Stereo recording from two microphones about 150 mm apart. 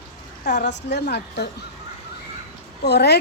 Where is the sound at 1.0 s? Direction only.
90° left.